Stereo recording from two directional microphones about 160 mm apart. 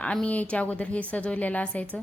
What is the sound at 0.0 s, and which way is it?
A man's voice, 5° left (ahead or behind).